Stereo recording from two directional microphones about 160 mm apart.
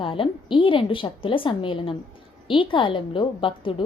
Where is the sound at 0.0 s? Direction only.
35° left (ahead or behind).